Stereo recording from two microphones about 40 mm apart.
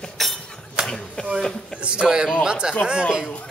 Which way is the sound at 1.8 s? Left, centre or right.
Right.